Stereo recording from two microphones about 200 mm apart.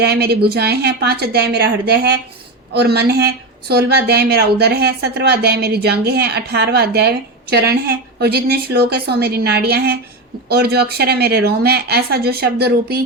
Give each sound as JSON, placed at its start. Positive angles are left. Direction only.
{"t": 0.0, "sound": "a woman's voice", "side_deg": -55}